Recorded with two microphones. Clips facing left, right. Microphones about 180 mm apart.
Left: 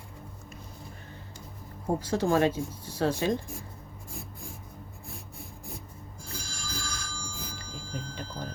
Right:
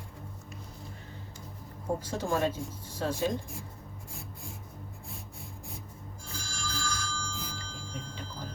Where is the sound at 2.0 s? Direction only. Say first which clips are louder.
Left 7 dB; 80° left.